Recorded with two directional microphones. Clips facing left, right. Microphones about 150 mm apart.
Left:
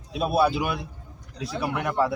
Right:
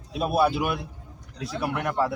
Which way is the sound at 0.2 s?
5° right (ahead or behind).